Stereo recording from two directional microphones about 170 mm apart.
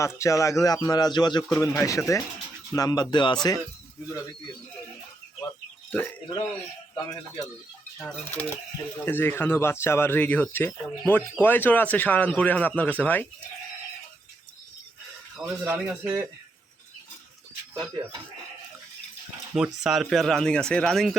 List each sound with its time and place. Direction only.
0.0 s speech: 15° left (ahead or behind)
5.9 s speech: 10° left (ahead or behind)
6.9 s speech: 25° left (ahead or behind)
7.9 s speech: 5° left (ahead or behind)
15.4 s speech: 5° right (ahead or behind)
19.5 s speech: 5° right (ahead or behind)